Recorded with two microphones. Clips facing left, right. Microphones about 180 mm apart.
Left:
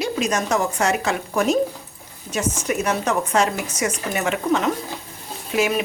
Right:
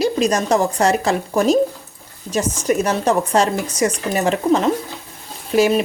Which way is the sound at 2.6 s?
35° right (ahead or behind).